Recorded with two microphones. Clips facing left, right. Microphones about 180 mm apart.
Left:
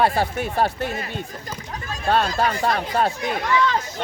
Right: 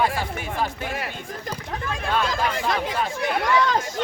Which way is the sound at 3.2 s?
65° right (ahead or behind).